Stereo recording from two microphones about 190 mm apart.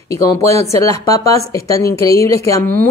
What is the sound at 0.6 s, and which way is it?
Speech, 15° left (ahead or behind).